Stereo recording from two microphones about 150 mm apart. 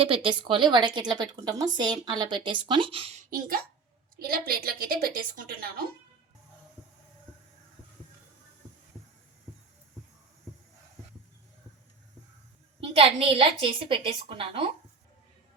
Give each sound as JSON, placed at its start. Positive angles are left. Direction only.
{"t": 0.0, "sound": "speech", "side_deg": -35}
{"t": 3.2, "sound": "speech", "side_deg": -65}
{"t": 4.2, "sound": "a woman's voice", "side_deg": -80}
{"t": 12.8, "sound": "speech", "side_deg": -40}